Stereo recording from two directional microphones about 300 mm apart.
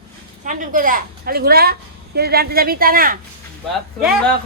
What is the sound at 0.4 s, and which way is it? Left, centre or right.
A woman's voice, right.